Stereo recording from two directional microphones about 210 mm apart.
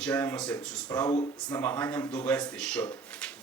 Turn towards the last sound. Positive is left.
turn(degrees=5)  # may be behind; listen again after turning